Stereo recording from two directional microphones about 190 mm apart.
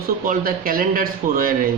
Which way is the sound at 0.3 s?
50° right (ahead or behind).